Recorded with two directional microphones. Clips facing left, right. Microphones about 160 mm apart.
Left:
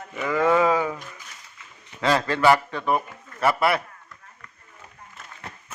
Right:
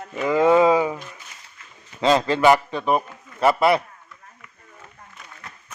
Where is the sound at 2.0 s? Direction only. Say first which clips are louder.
Right 3 dB; 20° right (ahead or behind).